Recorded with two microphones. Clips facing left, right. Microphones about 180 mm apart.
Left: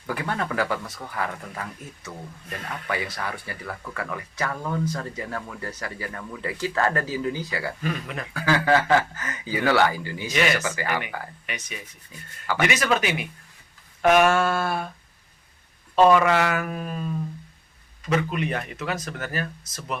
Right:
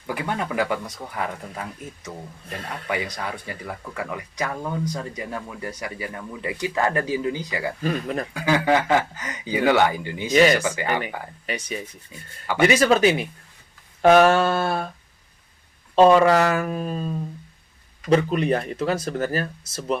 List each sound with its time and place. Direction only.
0.1 s speech: 15° right (ahead or behind)
7.9 s speech: 40° right (ahead or behind)
8.3 s speech: 15° right (ahead or behind)
10.3 s speech: 35° right (ahead or behind)
16.0 s speech: 30° right (ahead or behind)
18.1 s speech: 35° right (ahead or behind)